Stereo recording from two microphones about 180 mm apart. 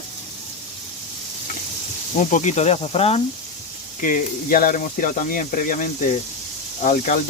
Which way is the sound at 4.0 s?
45° left (ahead or behind).